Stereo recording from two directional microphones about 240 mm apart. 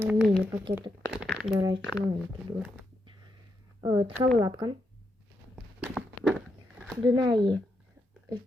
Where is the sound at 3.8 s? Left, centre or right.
Centre.